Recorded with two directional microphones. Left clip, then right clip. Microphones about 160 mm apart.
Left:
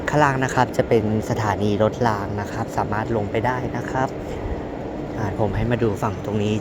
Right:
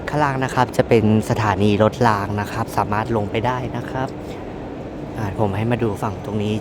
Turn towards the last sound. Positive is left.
turn(degrees=-10)  # may be behind; listen again after turning